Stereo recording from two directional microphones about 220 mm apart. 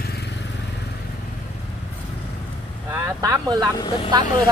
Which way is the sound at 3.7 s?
20° left (ahead or behind).